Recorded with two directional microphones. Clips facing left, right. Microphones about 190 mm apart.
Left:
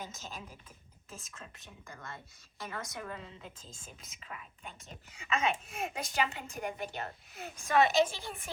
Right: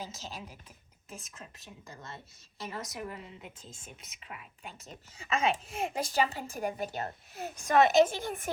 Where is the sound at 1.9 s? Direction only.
20° right (ahead or behind).